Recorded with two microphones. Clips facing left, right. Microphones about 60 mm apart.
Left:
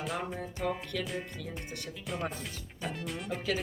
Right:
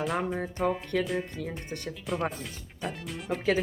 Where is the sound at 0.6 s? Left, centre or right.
Right.